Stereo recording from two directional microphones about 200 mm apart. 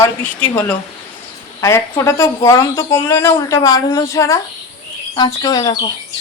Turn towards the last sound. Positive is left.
turn(degrees=20)  # may be behind; listen again after turning